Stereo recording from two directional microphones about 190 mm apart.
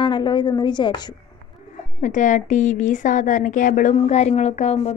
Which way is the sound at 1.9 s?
40° left (ahead or behind).